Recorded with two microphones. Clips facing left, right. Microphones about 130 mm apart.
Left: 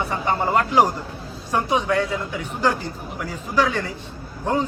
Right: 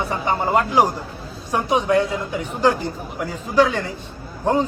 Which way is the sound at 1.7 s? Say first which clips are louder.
Right 4 dB; 25° right (ahead or behind).